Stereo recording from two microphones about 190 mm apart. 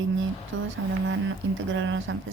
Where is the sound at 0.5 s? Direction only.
90° right.